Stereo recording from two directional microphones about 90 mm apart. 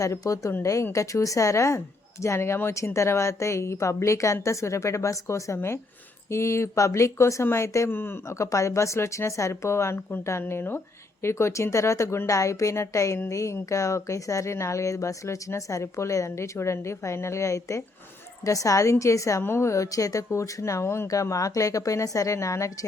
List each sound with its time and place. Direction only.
0.0 s speech: 35° left (ahead or behind)
7.9 s speech: 25° left (ahead or behind)